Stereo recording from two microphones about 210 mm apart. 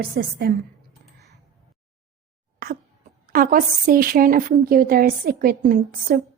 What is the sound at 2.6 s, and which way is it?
Cough, 45° right (ahead or behind).